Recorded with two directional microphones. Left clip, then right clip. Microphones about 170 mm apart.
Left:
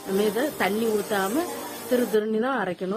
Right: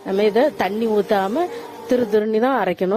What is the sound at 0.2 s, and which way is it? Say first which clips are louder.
Speech: right 8 dB; 40° right (ahead or behind).